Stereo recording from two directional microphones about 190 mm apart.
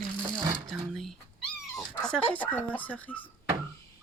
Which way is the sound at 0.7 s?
Centre (ahead or behind).